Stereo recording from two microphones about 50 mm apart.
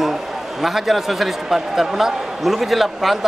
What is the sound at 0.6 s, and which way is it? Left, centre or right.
Speech, centre.